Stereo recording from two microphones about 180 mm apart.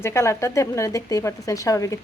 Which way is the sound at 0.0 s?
15° left (ahead or behind).